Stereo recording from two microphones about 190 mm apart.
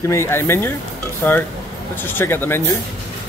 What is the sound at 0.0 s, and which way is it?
Speech, 15° left (ahead or behind).